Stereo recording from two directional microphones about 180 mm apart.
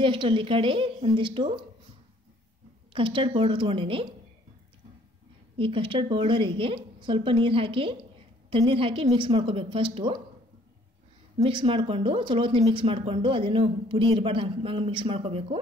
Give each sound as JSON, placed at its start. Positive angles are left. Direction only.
{"t": 0.0, "sound": "a woman's voice", "side_deg": -30}
{"t": 2.9, "sound": "a woman's voice", "side_deg": -30}
{"t": 5.6, "sound": "a woman's voice", "side_deg": -30}
{"t": 11.3, "sound": "a woman's voice", "side_deg": -30}